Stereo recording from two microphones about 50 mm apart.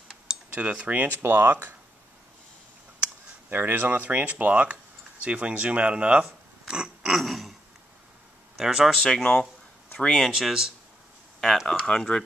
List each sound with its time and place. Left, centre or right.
0.3 s cutlery: right
1.0 s speech: right
3.4 s speech: right
6.7 s a sound: centre
8.5 s speech: centre
9.0 s speech: centre
10.3 s speech: centre
11.8 s speech: centre